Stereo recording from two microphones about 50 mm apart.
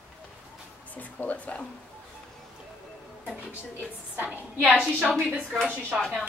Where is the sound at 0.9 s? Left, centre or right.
Left.